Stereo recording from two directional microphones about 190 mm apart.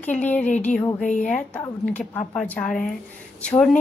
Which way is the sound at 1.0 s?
40° left (ahead or behind).